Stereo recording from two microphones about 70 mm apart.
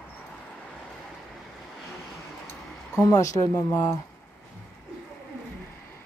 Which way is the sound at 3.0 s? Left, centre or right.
Left.